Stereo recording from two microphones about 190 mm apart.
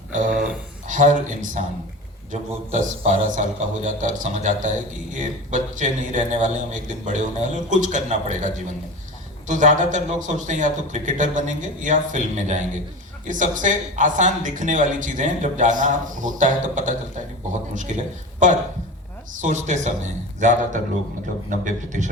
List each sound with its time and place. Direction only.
0.1 s a sound: 45° right (ahead or behind)
0.9 s speech: 40° right (ahead or behind)
9.5 s speech: 40° right (ahead or behind)
21.6 s speech: 40° right (ahead or behind)